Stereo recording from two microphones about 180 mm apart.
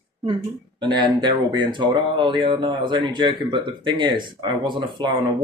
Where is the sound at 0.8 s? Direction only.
25° right (ahead or behind).